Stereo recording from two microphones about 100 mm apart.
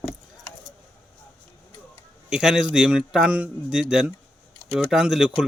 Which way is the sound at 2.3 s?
5° right (ahead or behind).